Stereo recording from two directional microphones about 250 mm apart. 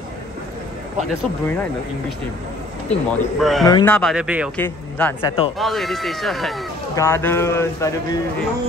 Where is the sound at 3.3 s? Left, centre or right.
Centre.